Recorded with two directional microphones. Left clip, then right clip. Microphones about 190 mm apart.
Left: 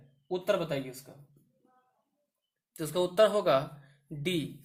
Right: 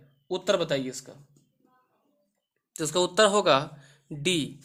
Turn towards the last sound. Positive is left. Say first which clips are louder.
# right 6 dB
turn(degrees=-30)  # may be behind; listen again after turning